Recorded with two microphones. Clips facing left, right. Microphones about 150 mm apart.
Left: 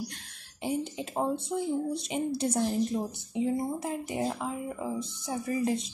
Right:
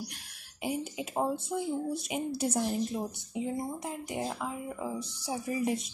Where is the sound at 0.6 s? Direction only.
5° right (ahead or behind).